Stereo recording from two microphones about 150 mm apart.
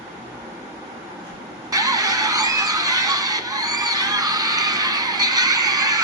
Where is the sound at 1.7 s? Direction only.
25° right (ahead or behind).